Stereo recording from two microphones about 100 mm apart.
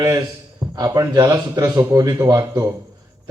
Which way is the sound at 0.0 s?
35° right (ahead or behind).